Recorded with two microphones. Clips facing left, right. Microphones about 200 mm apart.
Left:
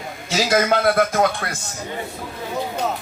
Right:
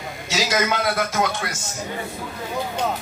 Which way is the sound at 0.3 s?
50° left (ahead or behind).